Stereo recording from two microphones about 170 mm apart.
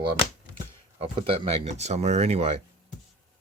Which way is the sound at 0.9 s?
35° right (ahead or behind).